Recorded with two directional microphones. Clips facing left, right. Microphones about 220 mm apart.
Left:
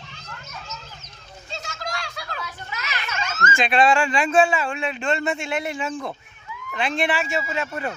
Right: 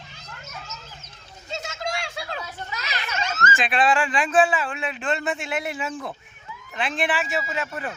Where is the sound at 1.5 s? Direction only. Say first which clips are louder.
Right 3 dB; 25° right (ahead or behind).